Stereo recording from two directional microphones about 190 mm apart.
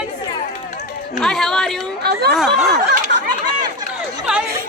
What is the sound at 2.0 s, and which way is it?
Speech, 60° right (ahead or behind).